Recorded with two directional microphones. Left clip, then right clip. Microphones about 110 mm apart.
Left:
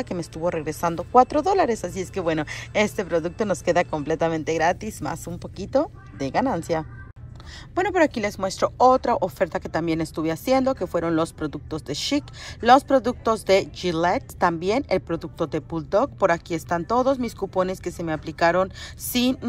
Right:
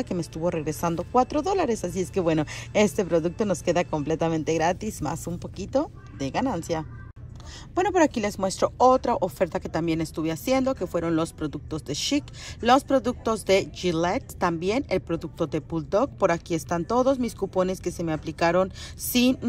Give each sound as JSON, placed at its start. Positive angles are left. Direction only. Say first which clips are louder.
{"t": 0.0, "sound": "speech", "louder": "left 2 dB", "side_deg": -40}